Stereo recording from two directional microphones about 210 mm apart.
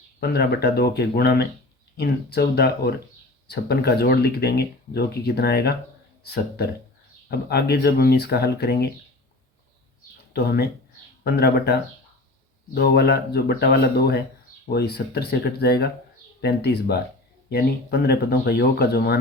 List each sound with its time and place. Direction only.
0.2 s speech: 50° left (ahead or behind)
7.3 s speech: 50° left (ahead or behind)
10.3 s speech: 50° left (ahead or behind)